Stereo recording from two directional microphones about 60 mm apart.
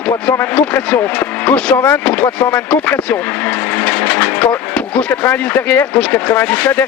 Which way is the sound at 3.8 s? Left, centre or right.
Left.